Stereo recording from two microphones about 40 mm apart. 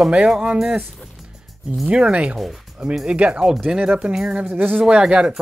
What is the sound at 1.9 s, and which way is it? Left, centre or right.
Speech, right.